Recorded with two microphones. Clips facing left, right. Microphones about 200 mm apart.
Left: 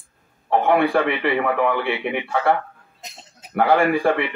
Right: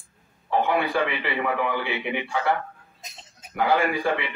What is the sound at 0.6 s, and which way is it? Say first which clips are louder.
A man's voice: left 7 dB; 60° left (ahead or behind).